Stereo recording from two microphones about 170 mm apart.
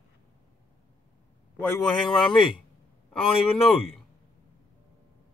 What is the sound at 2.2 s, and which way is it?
Speech, 30° left (ahead or behind).